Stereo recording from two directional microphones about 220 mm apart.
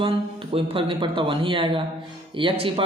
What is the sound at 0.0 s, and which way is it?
A man's voice, 25° right (ahead or behind).